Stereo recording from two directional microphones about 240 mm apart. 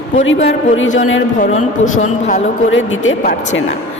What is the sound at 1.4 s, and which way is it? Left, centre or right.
A woman's voice, left.